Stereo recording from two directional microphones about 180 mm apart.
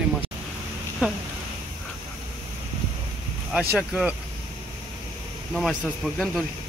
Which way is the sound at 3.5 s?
5° right (ahead or behind).